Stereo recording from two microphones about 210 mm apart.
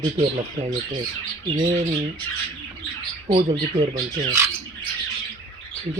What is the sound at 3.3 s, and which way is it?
Speech, 20° right (ahead or behind).